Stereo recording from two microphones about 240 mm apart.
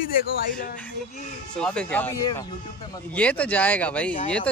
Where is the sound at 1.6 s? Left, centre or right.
Centre.